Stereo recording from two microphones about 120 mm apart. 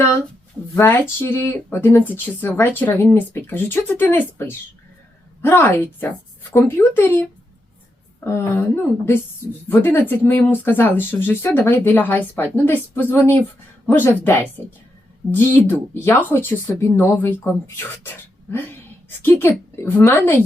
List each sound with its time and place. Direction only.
0.8 s speech: 20° left (ahead or behind)
18.5 s speech: 20° left (ahead or behind)